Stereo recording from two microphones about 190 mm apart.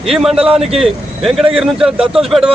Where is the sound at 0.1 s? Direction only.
Centre (ahead or behind).